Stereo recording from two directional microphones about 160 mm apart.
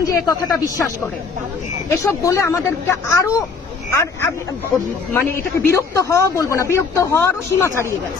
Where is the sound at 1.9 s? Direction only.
20° left (ahead or behind).